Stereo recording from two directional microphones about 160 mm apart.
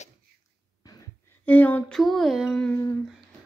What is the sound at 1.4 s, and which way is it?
Speech, 10° left (ahead or behind).